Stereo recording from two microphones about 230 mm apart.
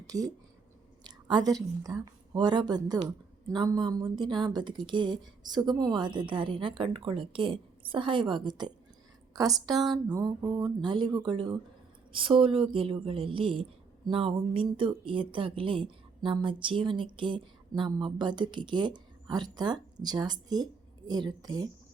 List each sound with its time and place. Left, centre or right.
0.1 s speech: centre
1.0 s a sound: centre
1.8 s speech: centre